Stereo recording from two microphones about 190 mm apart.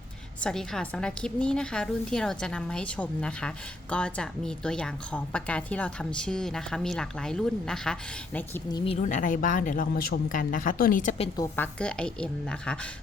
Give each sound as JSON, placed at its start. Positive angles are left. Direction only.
{"t": 0.4, "sound": "a woman's voice", "side_deg": 5}
{"t": 8.7, "sound": "a woman's voice", "side_deg": 30}
{"t": 11.3, "sound": "a woman's voice", "side_deg": 10}